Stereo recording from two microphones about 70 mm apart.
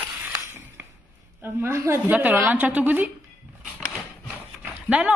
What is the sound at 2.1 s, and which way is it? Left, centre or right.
Speech, right.